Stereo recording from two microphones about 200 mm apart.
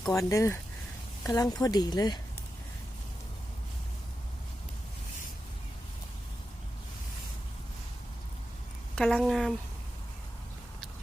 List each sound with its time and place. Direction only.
0.0 s speech: 15° left (ahead or behind)
9.0 s a woman's voice: 5° left (ahead or behind)